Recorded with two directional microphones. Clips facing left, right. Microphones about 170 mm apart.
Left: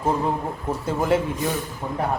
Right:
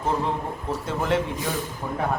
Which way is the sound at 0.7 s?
5° left (ahead or behind).